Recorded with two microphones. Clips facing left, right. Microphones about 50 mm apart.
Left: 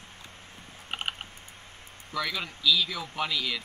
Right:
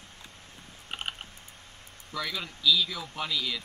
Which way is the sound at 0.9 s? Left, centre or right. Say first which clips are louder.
Left 3 dB; left.